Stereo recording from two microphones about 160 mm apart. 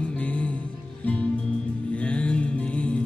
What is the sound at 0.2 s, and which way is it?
Music, 5° left (ahead or behind).